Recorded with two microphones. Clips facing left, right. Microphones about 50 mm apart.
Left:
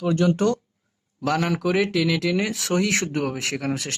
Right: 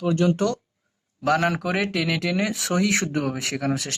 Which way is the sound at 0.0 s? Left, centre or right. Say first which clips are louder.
Even; left.